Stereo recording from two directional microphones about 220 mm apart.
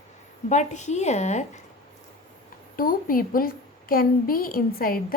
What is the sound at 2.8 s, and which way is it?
A woman's voice, 40° left (ahead or behind).